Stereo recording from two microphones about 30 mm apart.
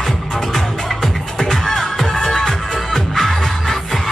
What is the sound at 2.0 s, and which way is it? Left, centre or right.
Music, left.